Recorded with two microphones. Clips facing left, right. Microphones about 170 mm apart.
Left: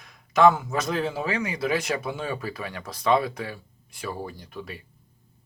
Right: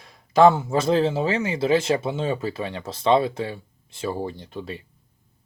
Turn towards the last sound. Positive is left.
turn(degrees=-25)  # may be behind; listen again after turning